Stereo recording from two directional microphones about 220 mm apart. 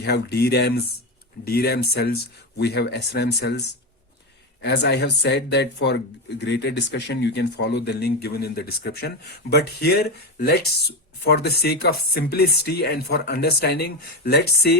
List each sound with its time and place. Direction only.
0.0 s speech: 50° left (ahead or behind)
4.6 s speech: 50° left (ahead or behind)